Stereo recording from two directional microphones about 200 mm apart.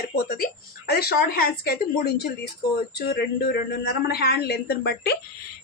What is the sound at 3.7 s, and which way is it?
A woman's voice, 50° left (ahead or behind).